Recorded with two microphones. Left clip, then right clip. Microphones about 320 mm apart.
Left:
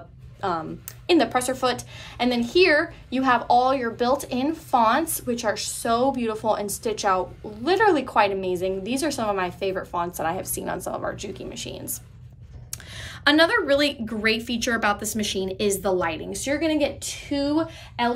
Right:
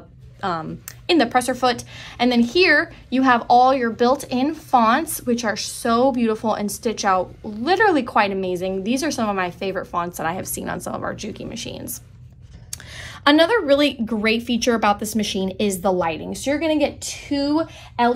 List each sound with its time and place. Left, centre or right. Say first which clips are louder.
0.4 s speech: right 2 dB; right